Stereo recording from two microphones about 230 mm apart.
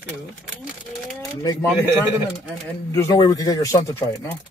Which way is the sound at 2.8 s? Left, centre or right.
Centre.